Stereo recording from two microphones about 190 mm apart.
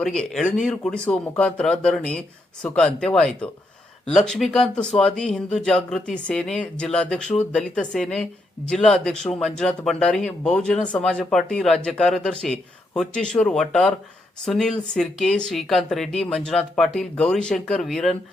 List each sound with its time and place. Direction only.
0.0 s speech: 5° left (ahead or behind)